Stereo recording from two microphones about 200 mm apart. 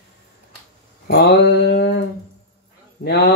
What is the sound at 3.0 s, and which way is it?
Speech, 50° left (ahead or behind).